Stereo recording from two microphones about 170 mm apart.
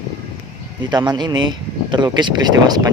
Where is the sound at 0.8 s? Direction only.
25° right (ahead or behind).